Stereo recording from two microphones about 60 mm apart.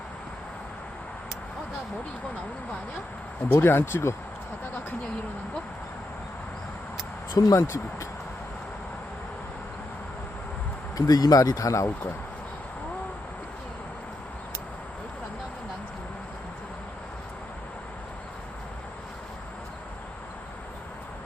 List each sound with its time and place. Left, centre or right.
3.5 s speech: left
4.6 s speech: left
7.3 s speech: left
10.9 s speech: left